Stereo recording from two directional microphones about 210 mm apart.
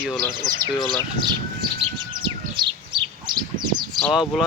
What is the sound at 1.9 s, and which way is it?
Bird, 20° right (ahead or behind).